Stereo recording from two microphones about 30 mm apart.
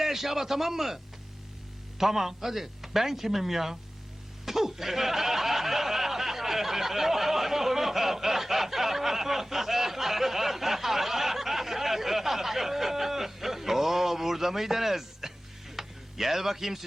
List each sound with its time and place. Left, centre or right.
0.0 s speech: centre
2.0 s speech: centre
4.4 s snicker: centre
15.7 s a sound: centre